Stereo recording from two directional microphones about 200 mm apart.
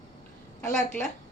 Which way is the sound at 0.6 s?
15° left (ahead or behind).